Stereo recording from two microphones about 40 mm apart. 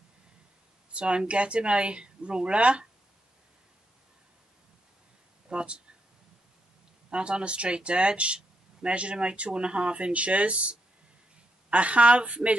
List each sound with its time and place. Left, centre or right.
0.9 s speech: right
5.5 s speech: right
7.1 s a woman's voice: right